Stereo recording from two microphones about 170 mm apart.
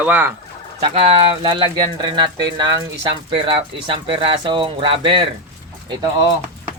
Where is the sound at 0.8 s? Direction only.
35° right (ahead or behind).